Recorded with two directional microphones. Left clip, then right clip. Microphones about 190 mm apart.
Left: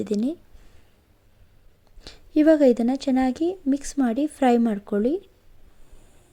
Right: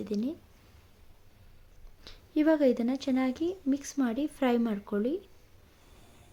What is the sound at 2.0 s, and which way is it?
Speech, 35° left (ahead or behind).